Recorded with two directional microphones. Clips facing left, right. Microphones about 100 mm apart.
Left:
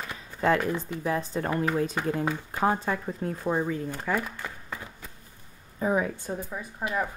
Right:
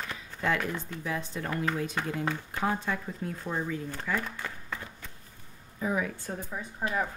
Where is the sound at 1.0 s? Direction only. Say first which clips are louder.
Left 6 dB; 40° left (ahead or behind).